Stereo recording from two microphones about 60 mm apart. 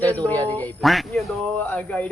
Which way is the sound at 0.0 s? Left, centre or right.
Left.